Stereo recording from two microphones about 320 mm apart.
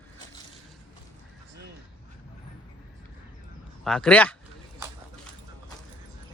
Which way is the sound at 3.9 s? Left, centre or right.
Centre.